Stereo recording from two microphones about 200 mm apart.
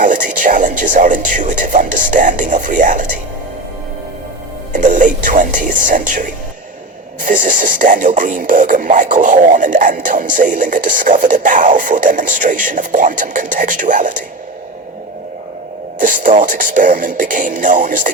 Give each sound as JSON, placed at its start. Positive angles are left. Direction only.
{"t": 0.0, "sound": "speech", "side_deg": -40}
{"t": 4.7, "sound": "speech", "side_deg": -40}
{"t": 16.0, "sound": "speech", "side_deg": -40}